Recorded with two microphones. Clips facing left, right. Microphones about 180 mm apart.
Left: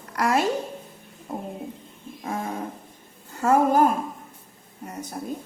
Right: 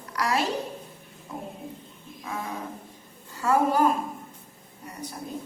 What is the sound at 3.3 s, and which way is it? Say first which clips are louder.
Speech: left 4 dB; 50° left (ahead or behind).